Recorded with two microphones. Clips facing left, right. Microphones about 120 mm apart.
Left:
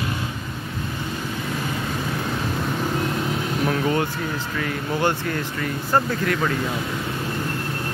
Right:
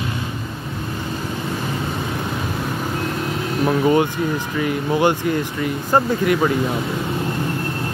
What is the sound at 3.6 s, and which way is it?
Speech, 15° right (ahead or behind).